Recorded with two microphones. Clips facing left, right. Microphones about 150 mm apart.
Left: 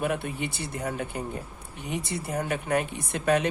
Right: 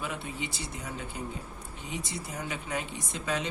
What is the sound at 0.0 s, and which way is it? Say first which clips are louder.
Speech: left 7 dB; 60° left (ahead or behind).